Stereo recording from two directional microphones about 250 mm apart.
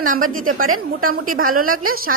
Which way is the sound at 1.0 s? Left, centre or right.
Right.